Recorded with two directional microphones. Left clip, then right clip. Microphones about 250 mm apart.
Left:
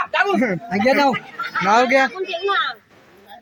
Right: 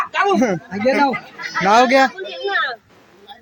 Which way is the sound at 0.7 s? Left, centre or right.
Left.